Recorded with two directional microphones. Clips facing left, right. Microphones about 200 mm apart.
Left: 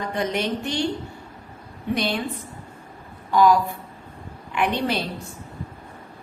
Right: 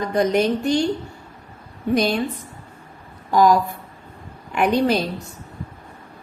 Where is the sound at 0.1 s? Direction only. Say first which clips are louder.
Right 8 dB; 40° right (ahead or behind).